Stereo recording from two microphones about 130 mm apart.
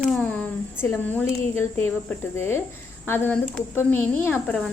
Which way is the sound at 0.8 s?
15° left (ahead or behind).